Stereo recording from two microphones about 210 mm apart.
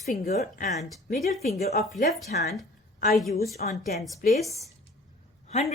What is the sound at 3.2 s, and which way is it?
Speech, centre (ahead or behind).